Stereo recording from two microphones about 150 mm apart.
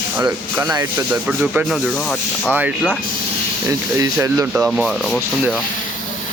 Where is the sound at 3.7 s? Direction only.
20° right (ahead or behind).